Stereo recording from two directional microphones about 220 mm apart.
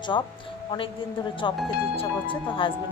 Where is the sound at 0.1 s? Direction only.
20° left (ahead or behind).